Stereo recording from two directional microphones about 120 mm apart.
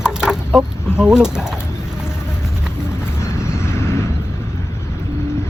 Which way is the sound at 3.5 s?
20° left (ahead or behind).